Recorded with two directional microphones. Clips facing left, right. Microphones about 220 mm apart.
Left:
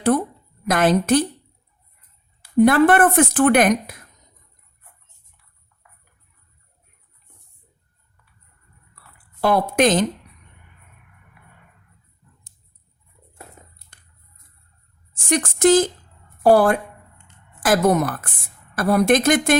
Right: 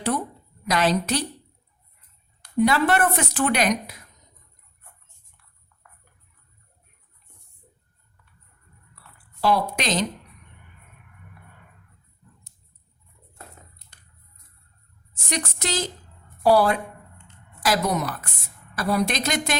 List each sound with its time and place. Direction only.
0.7 s a woman's voice: 50° left (ahead or behind)
2.6 s a woman's voice: 50° left (ahead or behind)
9.4 s a woman's voice: 50° left (ahead or behind)
13.9 s a sound: 50° left (ahead or behind)
15.1 s a woman's voice: 50° left (ahead or behind)